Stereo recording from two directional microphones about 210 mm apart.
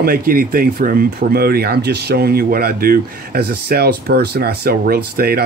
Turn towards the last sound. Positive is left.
turn(degrees=-45)  # may be behind; listen again after turning